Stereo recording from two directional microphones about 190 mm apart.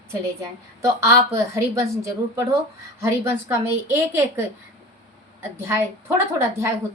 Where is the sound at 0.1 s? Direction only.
15° right (ahead or behind).